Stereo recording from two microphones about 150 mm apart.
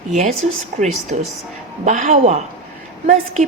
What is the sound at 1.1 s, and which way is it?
A woman's voice, 55° right (ahead or behind).